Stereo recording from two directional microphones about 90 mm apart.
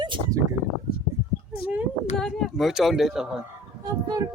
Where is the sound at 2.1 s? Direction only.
Centre (ahead or behind).